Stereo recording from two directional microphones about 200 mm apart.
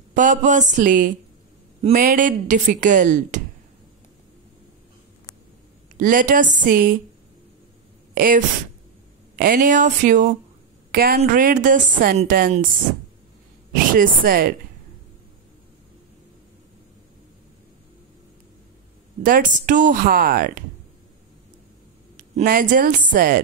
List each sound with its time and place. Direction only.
0.1 s speech: 40° right (ahead or behind)
5.9 s speech: 45° right (ahead or behind)
8.1 s a sound: 45° right (ahead or behind)
9.4 s speech: 45° right (ahead or behind)
13.9 s speech: 45° right (ahead or behind)
19.2 s speech: 45° right (ahead or behind)
22.1 s a woman's voice: 45° right (ahead or behind)